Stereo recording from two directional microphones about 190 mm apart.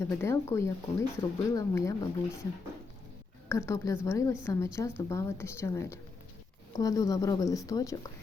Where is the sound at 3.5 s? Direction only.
15° left (ahead or behind).